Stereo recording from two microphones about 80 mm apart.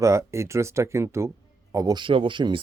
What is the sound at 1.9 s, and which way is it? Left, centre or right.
Speech, right.